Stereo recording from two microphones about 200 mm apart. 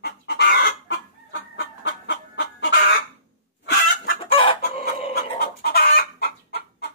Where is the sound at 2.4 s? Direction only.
60° left (ahead or behind).